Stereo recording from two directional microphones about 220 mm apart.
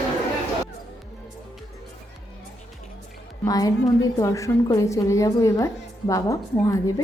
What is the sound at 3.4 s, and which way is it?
A woman's voice, 15° left (ahead or behind).